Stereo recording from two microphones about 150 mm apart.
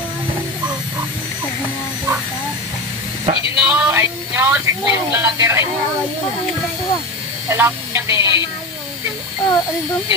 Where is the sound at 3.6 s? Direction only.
10° right (ahead or behind).